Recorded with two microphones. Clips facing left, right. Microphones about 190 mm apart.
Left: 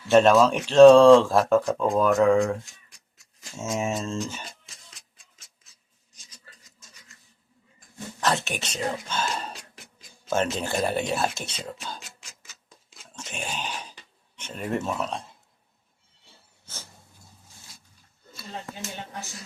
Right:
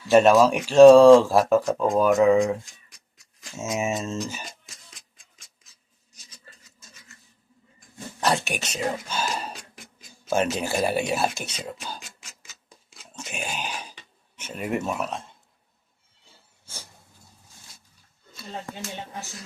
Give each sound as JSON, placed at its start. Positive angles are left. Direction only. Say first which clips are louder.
{"t": 0.1, "sound": "speech", "louder": "right 1 dB", "side_deg": -10}
{"t": 8.4, "sound": "speech", "louder": "right 2 dB", "side_deg": -10}
{"t": 11.3, "sound": "speech", "louder": "right 1 dB", "side_deg": 25}
{"t": 11.6, "sound": "speech", "louder": "right 1 dB", "side_deg": -10}
{"t": 12.9, "sound": "a sound", "louder": "right 2 dB", "side_deg": -10}
{"t": 14.3, "sound": "speech", "louder": "right 1 dB", "side_deg": -10}